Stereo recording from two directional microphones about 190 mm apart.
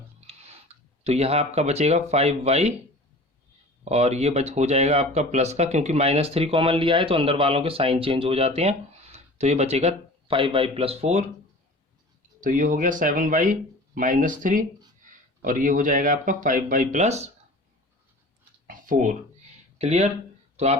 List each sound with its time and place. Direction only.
0.2 s a sound: 35° right (ahead or behind)
1.0 s speech: 35° right (ahead or behind)
3.8 s speech: 35° right (ahead or behind)
12.4 s speech: 45° right (ahead or behind)
18.7 s a sound: 45° right (ahead or behind)
19.8 s speech: 35° right (ahead or behind)